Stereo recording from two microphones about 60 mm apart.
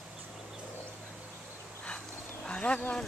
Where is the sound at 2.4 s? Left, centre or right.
Centre.